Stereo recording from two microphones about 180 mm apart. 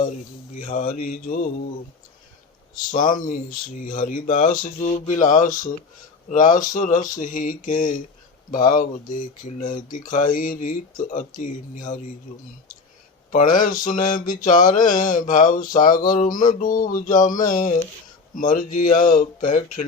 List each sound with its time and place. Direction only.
0.6 s mantra: 50° left (ahead or behind)
2.9 s mantra: 50° left (ahead or behind)